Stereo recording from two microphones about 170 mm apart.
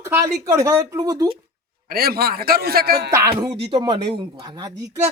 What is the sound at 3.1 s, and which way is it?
Speech, 20° right (ahead or behind).